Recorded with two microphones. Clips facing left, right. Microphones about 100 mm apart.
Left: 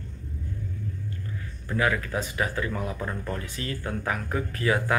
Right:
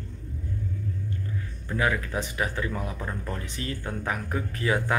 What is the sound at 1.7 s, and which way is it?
Speech, 20° right (ahead or behind).